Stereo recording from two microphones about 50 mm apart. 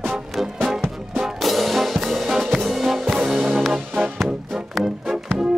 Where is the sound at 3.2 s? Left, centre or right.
Centre.